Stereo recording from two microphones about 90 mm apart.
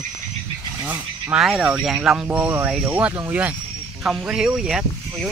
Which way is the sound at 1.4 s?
5° right (ahead or behind).